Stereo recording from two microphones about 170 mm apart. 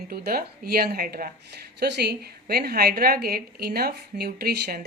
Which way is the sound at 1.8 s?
75° right (ahead or behind).